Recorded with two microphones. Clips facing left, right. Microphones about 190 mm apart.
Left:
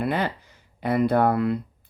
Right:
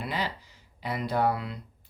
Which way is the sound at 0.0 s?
55° left (ahead or behind).